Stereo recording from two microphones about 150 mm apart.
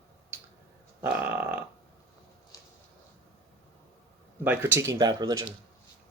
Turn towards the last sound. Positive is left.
turn(degrees=-25)  # may be behind; listen again after turning